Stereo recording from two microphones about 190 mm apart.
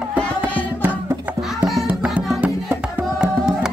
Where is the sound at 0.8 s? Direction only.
10° right (ahead or behind).